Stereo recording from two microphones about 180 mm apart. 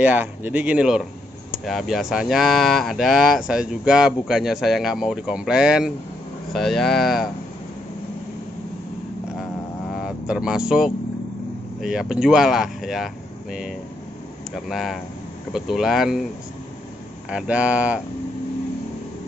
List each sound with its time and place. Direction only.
0.0 s speech: 10° right (ahead or behind)
9.9 s speech: 5° right (ahead or behind)
17.3 s speech: 5° right (ahead or behind)